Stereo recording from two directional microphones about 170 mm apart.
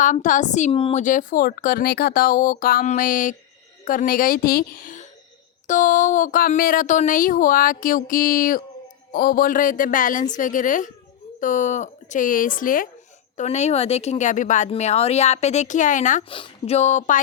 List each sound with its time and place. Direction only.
0.0 s speech: 50° left (ahead or behind)
0.7 s speech: 30° left (ahead or behind)
1.0 s speech: 50° left (ahead or behind)
13.3 s speech: 45° left (ahead or behind)
16.3 s speech: 35° left (ahead or behind)